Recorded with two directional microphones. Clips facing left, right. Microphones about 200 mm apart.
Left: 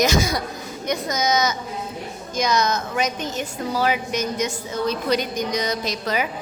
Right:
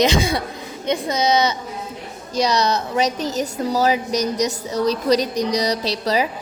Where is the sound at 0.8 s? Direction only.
30° right (ahead or behind).